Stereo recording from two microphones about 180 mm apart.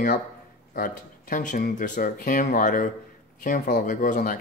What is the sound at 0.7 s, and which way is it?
Speech, 50° left (ahead or behind).